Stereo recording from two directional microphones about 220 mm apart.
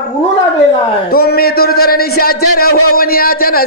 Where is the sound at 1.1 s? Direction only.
45° left (ahead or behind).